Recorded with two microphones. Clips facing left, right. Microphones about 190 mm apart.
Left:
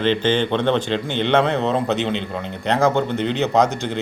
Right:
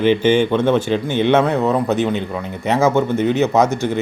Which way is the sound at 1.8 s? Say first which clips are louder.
Right 4 dB; 20° left (ahead or behind).